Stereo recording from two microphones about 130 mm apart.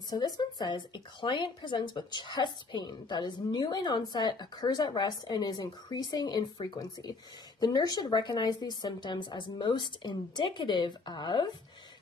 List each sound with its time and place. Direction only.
0.1 s speech: 30° left (ahead or behind)